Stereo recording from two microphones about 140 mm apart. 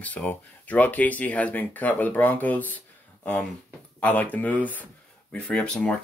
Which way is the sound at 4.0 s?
10° left (ahead or behind).